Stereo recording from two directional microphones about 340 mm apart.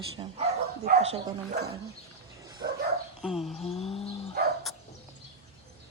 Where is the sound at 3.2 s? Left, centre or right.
Centre.